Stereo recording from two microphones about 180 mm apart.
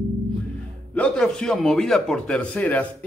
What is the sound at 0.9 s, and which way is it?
A man's voice, 5° left (ahead or behind).